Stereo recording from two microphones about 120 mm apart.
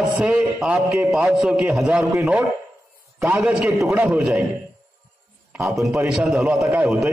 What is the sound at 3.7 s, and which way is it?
Speech, 20° right (ahead or behind).